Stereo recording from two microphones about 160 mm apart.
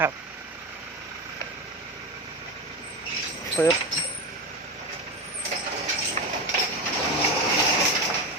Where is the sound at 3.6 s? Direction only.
10° left (ahead or behind).